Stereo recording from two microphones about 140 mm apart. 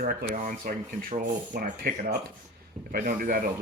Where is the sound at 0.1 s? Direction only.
80° right.